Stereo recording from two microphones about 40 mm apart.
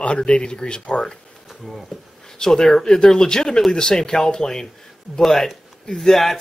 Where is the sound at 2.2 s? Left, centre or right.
Centre.